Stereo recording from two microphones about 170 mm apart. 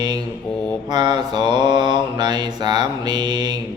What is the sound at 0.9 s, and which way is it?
Mantra, 25° right (ahead or behind).